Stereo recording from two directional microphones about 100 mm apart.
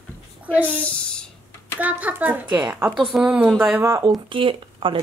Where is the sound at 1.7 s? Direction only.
15° right (ahead or behind).